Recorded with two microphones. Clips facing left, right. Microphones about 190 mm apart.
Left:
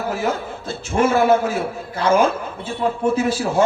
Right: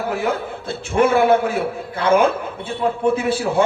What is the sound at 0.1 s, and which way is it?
A man's voice, 60° right (ahead or behind).